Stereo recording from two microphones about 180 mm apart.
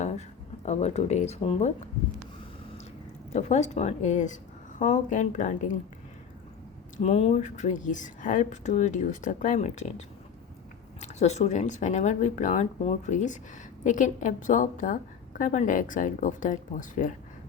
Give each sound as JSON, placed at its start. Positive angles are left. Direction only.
{"t": 0.0, "sound": "speech", "side_deg": 40}
{"t": 3.3, "sound": "a woman's voice", "side_deg": 40}
{"t": 6.9, "sound": "a woman's voice", "side_deg": 35}
{"t": 11.0, "sound": "a woman's voice", "side_deg": 40}